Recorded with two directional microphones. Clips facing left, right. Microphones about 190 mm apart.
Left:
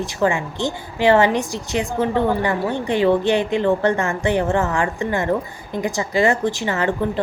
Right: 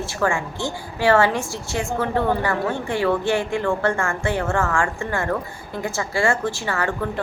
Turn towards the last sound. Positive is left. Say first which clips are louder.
# left 4 dB
turn(degrees=20)  # may be behind; listen again after turning